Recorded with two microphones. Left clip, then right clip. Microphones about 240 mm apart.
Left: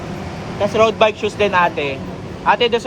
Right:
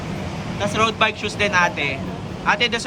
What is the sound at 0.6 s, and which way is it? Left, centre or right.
Speech, centre.